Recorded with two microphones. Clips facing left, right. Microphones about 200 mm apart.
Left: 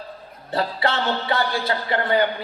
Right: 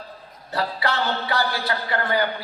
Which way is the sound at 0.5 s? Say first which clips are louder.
Left 2 dB; 25° left (ahead or behind).